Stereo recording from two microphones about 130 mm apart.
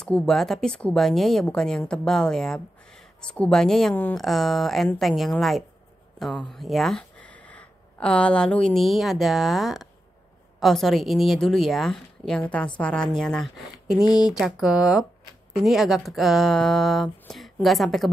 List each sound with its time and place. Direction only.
0.0 s speech: 5° left (ahead or behind)
3.9 s speech: 15° left (ahead or behind)
4.2 s speech: centre (ahead or behind)
14.0 s speech: 30° left (ahead or behind)
14.4 s speech: 5° right (ahead or behind)